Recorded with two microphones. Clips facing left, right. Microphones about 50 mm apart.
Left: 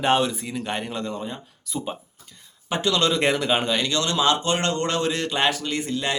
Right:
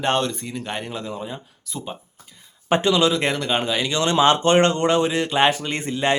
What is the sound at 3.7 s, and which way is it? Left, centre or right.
A man's voice, centre.